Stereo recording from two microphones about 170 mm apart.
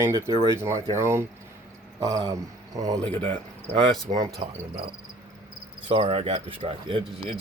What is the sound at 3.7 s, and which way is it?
Speech, centre (ahead or behind).